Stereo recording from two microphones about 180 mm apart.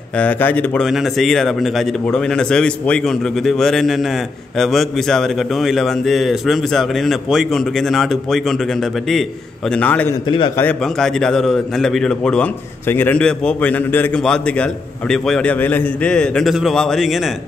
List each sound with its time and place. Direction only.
0.2 s a man's voice: 10° left (ahead or behind)
9.7 s a man's voice: 5° left (ahead or behind)
10.2 s a man's voice: 25° left (ahead or behind)
10.6 s a man's voice: 5° left (ahead or behind)